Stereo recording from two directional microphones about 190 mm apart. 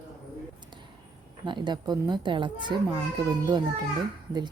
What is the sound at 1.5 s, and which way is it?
A woman's voice, 25° right (ahead or behind).